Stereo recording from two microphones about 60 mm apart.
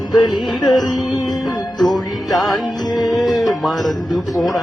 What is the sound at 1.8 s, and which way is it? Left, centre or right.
Music, centre.